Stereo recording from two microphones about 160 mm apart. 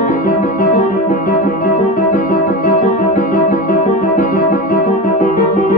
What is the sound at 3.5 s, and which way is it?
Music, 65° left (ahead or behind).